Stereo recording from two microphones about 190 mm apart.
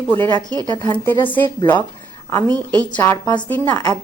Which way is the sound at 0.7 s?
25° left (ahead or behind).